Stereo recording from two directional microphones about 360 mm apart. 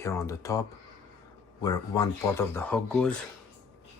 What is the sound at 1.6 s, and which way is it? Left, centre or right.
Speech, centre.